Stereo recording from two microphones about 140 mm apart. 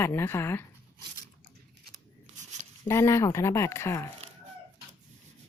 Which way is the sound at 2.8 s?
20° left (ahead or behind).